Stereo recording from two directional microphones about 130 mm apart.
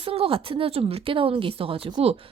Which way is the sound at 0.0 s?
45° right (ahead or behind).